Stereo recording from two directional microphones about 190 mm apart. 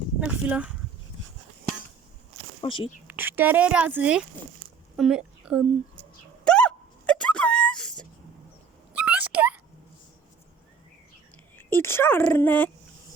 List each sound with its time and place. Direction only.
0.3 s speech: 5° right (ahead or behind)
2.6 s speech: 25° left (ahead or behind)
3.1 s speech: 10° right (ahead or behind)
6.4 s a sound: 5° left (ahead or behind)
8.9 s a sound: 5° right (ahead or behind)
11.5 s speech: 10° left (ahead or behind)